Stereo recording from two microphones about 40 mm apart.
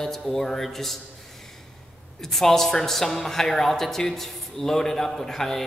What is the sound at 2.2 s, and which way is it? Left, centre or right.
A man's voice, centre.